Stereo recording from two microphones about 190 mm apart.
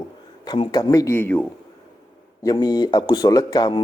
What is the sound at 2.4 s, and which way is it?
Speech, 20° left (ahead or behind).